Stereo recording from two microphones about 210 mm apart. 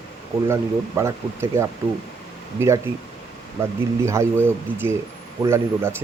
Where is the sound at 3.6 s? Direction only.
15° right (ahead or behind).